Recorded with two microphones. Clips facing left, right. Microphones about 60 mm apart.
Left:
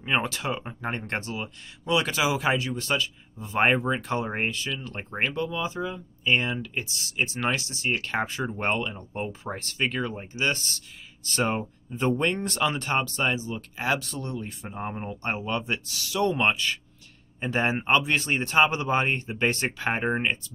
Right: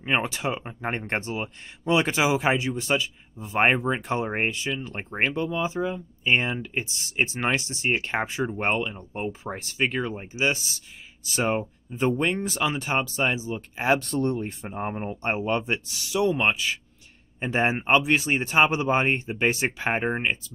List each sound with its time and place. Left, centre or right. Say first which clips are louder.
0.0 s speech: right 1 dB; centre
14.0 s speech: right 8 dB; right
14.7 s speech: right 2 dB; right
16.3 s speech: left 1 dB; centre